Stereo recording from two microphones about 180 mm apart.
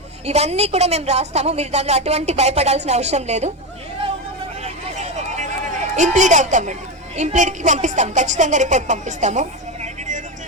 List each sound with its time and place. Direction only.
0.3 s a woman's voice: 35° right (ahead or behind)
4.6 s a sound: 40° right (ahead or behind)
7.2 s speech: 40° right (ahead or behind)